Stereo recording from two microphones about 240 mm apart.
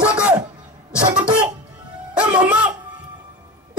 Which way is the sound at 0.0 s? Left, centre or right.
Centre.